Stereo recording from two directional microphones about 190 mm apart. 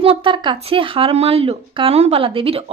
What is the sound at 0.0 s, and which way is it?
A woman's voice, 30° right (ahead or behind).